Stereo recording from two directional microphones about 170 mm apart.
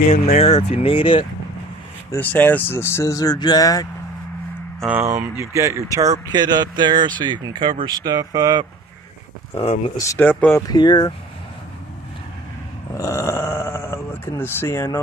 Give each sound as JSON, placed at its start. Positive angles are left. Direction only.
{"t": 0.1, "sound": "speech", "side_deg": 35}
{"t": 2.1, "sound": "speech", "side_deg": 10}
{"t": 4.7, "sound": "speech", "side_deg": -5}
{"t": 9.6, "sound": "speech", "side_deg": 35}
{"t": 10.0, "sound": "speech", "side_deg": 10}
{"t": 10.7, "sound": "speech", "side_deg": 25}
{"t": 12.9, "sound": "speech", "side_deg": 15}